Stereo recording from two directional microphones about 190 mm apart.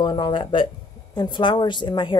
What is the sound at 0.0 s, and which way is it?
Speech, 25° left (ahead or behind).